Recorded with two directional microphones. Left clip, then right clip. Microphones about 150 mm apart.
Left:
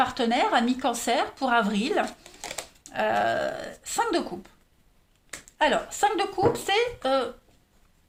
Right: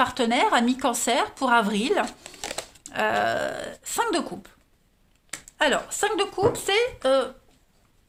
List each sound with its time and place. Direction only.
0.0 s speech: 45° right (ahead or behind); by 7.3 s 30° right (ahead or behind)